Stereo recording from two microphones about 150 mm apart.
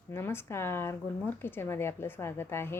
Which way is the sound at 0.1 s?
15° left (ahead or behind).